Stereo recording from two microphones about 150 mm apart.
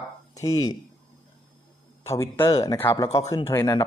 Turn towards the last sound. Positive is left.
turn(degrees=20)  # may be behind; listen again after turning